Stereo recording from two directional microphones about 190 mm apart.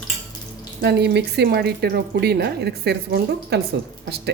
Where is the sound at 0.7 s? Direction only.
60° right (ahead or behind).